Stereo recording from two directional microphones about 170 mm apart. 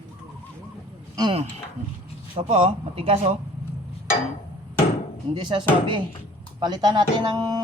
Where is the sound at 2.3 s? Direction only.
35° right (ahead or behind).